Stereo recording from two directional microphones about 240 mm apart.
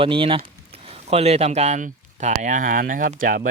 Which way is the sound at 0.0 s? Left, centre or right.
Right.